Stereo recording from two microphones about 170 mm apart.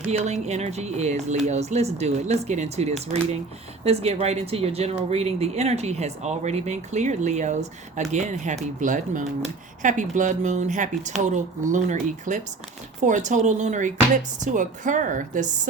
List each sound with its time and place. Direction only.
0.1 s speech: 40° right (ahead or behind)